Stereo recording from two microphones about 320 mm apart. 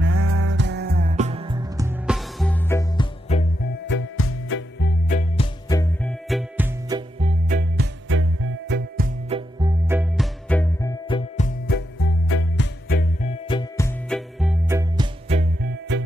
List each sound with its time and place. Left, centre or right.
0.0 s music: right; by 3.4 s centre
4.5 s music: left
5.7 s music: centre
6.2 s music: centre
7.2 s music: right
9.6 s music: centre
10.5 s music: centre; by 12.1 s left
12.3 s music: left
12.8 s music: left; by 15.7 s centre